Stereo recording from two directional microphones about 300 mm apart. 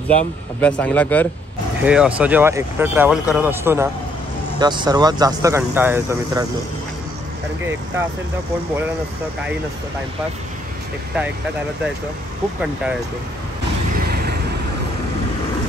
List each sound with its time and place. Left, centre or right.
0.1 s speech: centre
13.9 s vehicle: right